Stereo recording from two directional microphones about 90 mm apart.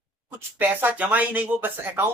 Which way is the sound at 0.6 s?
20° right (ahead or behind).